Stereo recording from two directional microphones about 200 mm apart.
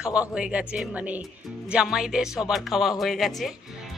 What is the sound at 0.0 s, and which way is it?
Speech, 5° right (ahead or behind).